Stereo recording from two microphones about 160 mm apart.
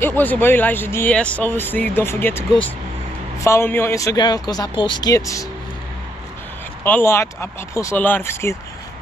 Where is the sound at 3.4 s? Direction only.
15° left (ahead or behind).